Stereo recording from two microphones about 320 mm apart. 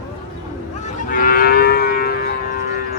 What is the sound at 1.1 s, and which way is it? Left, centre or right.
Livestock, left.